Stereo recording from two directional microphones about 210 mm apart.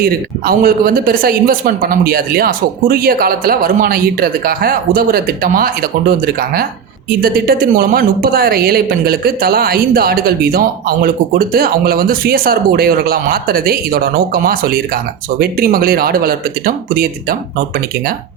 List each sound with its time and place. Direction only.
0.0 s a woman's voice: 45° right (ahead or behind)